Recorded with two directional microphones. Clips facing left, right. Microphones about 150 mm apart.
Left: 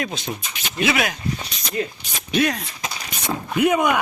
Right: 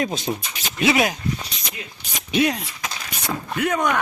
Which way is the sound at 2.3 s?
20° right (ahead or behind).